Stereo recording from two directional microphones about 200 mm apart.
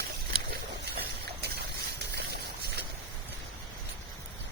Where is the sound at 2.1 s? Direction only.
55° right (ahead or behind).